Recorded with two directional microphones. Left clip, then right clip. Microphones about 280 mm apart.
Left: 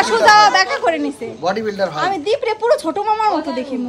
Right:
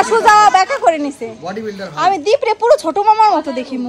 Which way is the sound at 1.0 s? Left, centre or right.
Left.